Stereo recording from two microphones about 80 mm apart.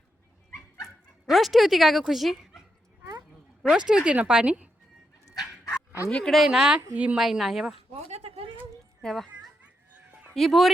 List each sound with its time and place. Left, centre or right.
1.3 s a woman's voice: centre
3.6 s speech: centre
6.1 s speech: centre
6.3 s speech: centre
7.2 s a woman's voice: centre
9.0 s a child's voice: centre
10.3 s a woman's voice: centre